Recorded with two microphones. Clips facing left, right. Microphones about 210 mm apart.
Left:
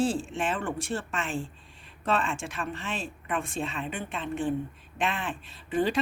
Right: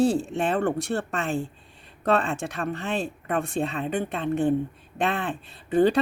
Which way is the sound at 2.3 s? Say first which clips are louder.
Right 5 dB; 60° right (ahead or behind).